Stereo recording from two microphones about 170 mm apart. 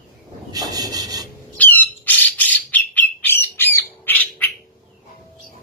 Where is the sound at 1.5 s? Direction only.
10° left (ahead or behind).